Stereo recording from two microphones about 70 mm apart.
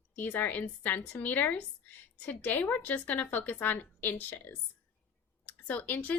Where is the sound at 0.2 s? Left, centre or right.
Left.